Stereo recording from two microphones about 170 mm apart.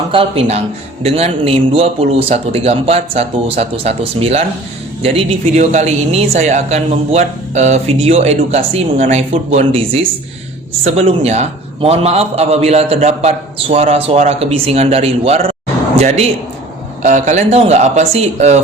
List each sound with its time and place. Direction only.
0.1 s a man's voice: 35° right (ahead or behind)